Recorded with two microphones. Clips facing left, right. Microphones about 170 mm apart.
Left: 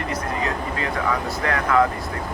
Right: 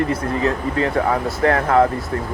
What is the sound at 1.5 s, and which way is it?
Speech, 45° right (ahead or behind).